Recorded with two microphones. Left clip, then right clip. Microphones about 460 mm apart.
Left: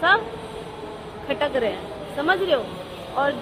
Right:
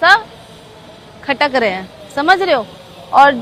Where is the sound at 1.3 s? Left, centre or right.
Right.